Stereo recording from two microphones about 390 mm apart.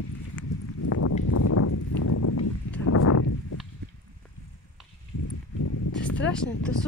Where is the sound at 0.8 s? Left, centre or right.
Left.